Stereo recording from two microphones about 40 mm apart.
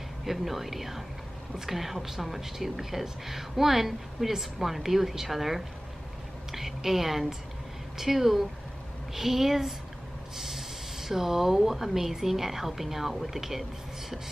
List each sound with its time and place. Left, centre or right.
0.2 s a woman's voice: centre
6.5 s a sound: centre
8.0 s a woman's voice: centre